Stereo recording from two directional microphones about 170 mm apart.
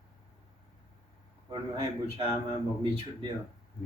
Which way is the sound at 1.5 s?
35° right (ahead or behind).